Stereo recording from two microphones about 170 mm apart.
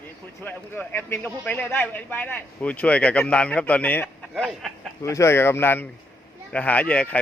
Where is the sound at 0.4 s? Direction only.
10° left (ahead or behind).